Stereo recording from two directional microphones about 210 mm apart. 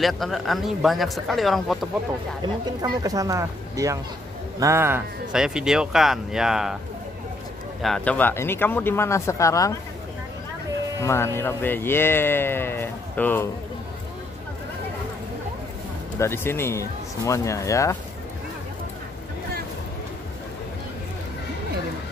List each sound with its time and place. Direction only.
0.0 s speech: centre (ahead or behind)
2.8 s speech: 15° right (ahead or behind)
7.8 s speech: 5° left (ahead or behind)
11.0 s speech: 15° left (ahead or behind)
16.2 s speech: 10° left (ahead or behind)